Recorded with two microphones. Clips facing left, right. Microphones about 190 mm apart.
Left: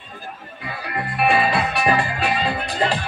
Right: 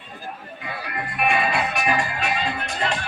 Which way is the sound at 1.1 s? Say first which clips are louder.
Left 4 dB; 30° left (ahead or behind).